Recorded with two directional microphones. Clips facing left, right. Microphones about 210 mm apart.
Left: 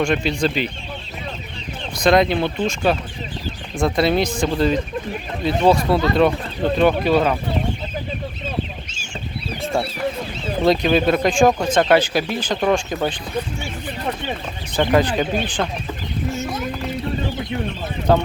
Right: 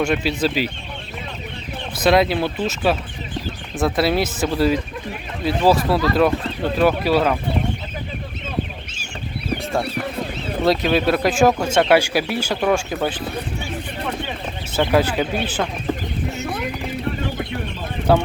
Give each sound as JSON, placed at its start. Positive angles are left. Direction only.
{"t": 0.0, "sound": "speech", "side_deg": -5}
{"t": 2.0, "sound": "speech", "side_deg": -5}
{"t": 10.6, "sound": "speech", "side_deg": 0}
{"t": 14.8, "sound": "speech", "side_deg": -5}
{"t": 16.3, "sound": "speech", "side_deg": -65}
{"t": 18.1, "sound": "speech", "side_deg": -10}